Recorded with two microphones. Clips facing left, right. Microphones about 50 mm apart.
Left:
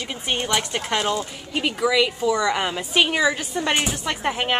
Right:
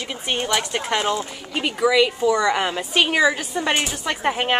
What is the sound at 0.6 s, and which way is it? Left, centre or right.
Speech, centre.